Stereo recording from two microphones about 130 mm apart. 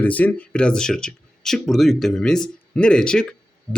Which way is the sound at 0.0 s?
10° left (ahead or behind).